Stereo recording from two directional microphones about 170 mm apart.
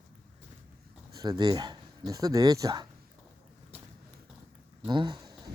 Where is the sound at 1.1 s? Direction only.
20° right (ahead or behind).